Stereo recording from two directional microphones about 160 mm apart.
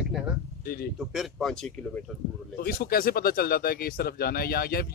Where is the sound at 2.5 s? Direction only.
70° left (ahead or behind).